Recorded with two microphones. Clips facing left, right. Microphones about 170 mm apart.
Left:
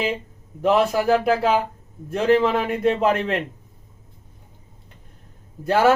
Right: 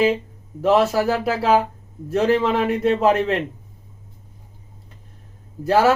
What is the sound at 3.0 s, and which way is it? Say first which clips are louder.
Speech: right 3 dB; 35° right (ahead or behind).